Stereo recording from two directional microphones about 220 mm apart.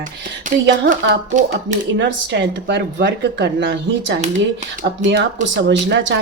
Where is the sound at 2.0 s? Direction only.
50° right (ahead or behind).